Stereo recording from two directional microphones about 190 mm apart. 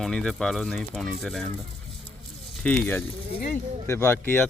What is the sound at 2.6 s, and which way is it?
Speech, 10° left (ahead or behind).